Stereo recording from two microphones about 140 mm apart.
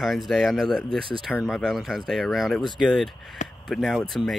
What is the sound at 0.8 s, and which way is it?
Speech, 40° right (ahead or behind).